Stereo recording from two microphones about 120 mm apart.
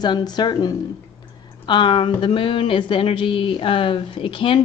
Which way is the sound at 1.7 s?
45° left (ahead or behind).